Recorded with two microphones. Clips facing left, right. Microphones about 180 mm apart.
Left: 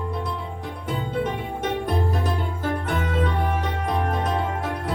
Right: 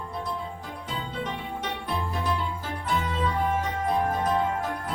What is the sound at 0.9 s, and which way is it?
Music, 50° left (ahead or behind).